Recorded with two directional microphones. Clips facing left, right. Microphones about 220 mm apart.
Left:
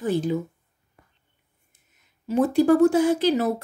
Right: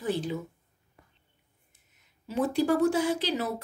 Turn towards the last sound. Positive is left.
turn(degrees=50)  # may be behind; listen again after turning